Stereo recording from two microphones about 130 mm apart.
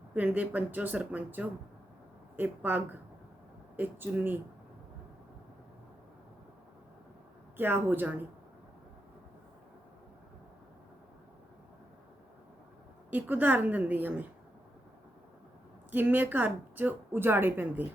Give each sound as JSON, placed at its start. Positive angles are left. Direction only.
{"t": 0.1, "sound": "speech", "side_deg": -10}
{"t": 7.5, "sound": "speech", "side_deg": -15}
{"t": 13.1, "sound": "speech", "side_deg": -15}
{"t": 15.9, "sound": "speech", "side_deg": -15}